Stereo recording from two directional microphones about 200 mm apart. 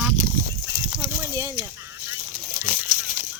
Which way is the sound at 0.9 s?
10° right (ahead or behind).